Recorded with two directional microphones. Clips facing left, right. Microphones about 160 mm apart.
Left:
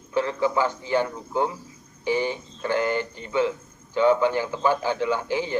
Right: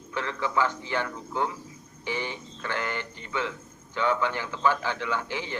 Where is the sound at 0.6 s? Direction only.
35° left (ahead or behind).